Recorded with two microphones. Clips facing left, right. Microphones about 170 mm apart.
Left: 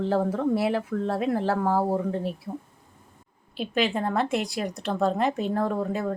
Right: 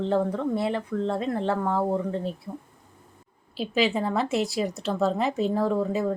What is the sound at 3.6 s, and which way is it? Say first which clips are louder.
Speech: right 1 dB; centre (ahead or behind).